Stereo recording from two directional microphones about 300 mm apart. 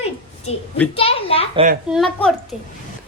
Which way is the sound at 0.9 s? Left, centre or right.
Centre.